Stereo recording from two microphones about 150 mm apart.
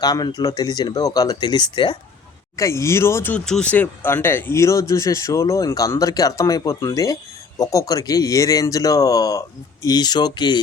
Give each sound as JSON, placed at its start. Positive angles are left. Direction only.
{"t": 0.0, "sound": "speech", "side_deg": 25}
{"t": 2.6, "sound": "speech", "side_deg": 20}
{"t": 3.3, "sound": "speech", "side_deg": 5}